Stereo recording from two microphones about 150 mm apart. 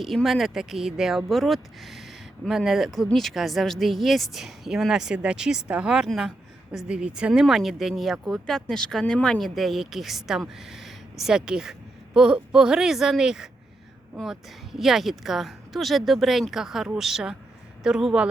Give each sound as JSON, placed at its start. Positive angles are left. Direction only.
{"t": 0.0, "sound": "speech", "side_deg": 0}